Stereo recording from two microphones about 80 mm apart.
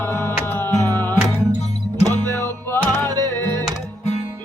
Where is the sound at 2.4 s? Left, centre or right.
Left.